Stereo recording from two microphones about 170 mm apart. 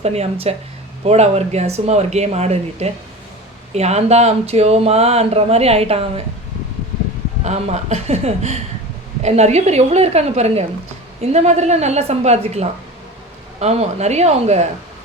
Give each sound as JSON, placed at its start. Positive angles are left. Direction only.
{"t": 0.0, "sound": "speech", "side_deg": -40}
{"t": 7.4, "sound": "speech", "side_deg": -40}